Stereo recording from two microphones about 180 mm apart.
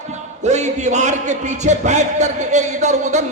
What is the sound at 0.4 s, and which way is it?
A man's voice, 40° right (ahead or behind).